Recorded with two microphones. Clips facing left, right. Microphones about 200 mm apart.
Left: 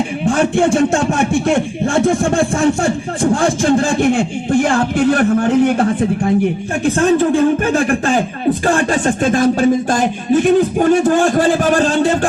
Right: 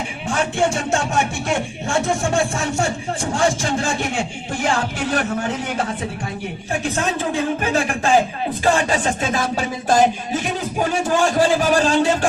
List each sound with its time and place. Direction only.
0.5 s speech: 55° left (ahead or behind)